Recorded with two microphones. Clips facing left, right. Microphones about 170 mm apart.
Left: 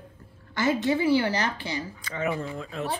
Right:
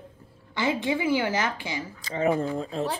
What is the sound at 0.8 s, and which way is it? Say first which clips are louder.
A woman's voice: left 3 dB; 10° right (ahead or behind).